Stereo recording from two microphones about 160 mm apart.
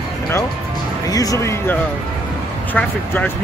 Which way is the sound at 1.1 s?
20° left (ahead or behind).